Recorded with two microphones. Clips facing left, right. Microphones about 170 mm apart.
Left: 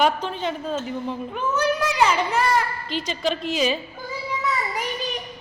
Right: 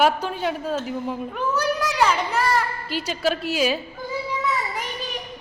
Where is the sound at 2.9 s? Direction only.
5° right (ahead or behind).